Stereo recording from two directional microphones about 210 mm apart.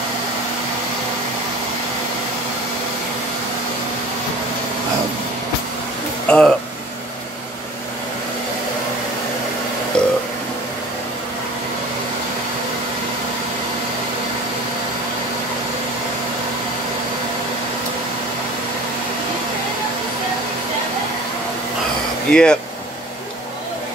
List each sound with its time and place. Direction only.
6.2 s speech: 5° left (ahead or behind)
10.0 s burping: 5° left (ahead or behind)
22.3 s a sound: 5° left (ahead or behind)